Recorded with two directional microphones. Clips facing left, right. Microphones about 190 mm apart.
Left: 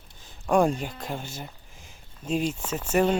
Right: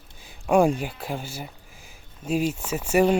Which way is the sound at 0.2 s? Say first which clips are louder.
Right 2 dB; 10° right (ahead or behind).